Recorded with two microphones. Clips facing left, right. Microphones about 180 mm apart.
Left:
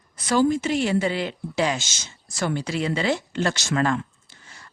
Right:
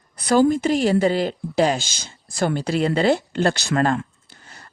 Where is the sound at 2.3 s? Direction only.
55° right (ahead or behind).